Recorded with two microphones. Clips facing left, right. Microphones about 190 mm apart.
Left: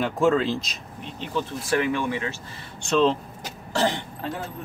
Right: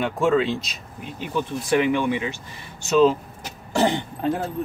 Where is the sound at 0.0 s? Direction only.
Centre (ahead or behind).